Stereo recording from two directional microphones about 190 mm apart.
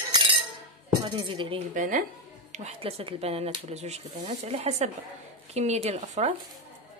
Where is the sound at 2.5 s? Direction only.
30° right (ahead or behind).